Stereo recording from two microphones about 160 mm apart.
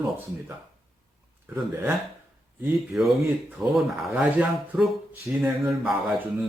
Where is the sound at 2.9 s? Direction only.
Centre (ahead or behind).